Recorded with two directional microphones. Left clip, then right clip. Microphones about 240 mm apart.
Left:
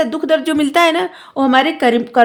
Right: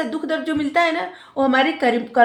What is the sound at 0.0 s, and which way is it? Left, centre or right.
Speech, left.